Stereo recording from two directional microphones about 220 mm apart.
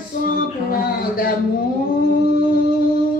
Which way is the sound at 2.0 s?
40° left (ahead or behind).